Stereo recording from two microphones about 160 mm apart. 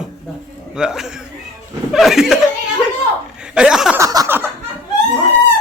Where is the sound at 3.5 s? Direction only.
5° right (ahead or behind).